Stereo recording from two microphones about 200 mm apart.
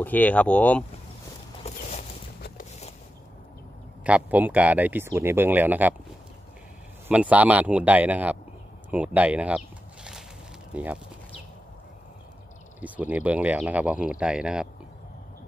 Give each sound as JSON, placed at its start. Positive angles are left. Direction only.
{"t": 0.0, "sound": "speech", "side_deg": 10}
{"t": 1.6, "sound": "a sound", "side_deg": 35}
{"t": 4.0, "sound": "speech", "side_deg": -5}
{"t": 7.1, "sound": "speech", "side_deg": -5}
{"t": 10.7, "sound": "speech", "side_deg": -5}
{"t": 12.8, "sound": "speech", "side_deg": -10}